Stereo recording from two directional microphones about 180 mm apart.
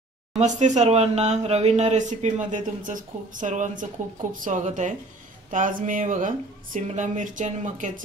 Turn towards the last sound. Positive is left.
turn(degrees=-45)  # may be behind; listen again after turning